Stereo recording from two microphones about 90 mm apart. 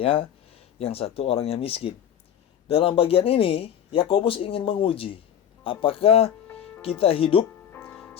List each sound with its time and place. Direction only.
0.0 s speech: 90° left
7.7 s music: 20° left (ahead or behind)